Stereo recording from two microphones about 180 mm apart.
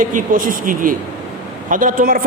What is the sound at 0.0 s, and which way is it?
A man's voice, 45° right (ahead or behind).